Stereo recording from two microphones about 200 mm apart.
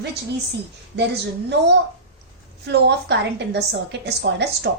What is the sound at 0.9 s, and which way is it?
A woman's voice, 60° right (ahead or behind).